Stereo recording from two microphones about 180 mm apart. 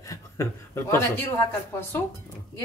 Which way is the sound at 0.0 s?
15° left (ahead or behind).